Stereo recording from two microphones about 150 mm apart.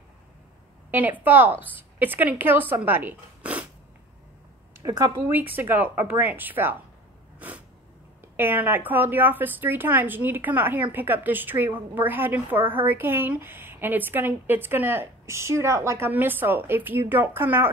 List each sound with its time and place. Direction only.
0.9 s speech: 10° right (ahead or behind)
4.7 s a woman's voice: 25° right (ahead or behind)
5.3 s speech: 15° right (ahead or behind)
7.3 s a sound: 10° right (ahead or behind)
8.4 s speech: 15° right (ahead or behind)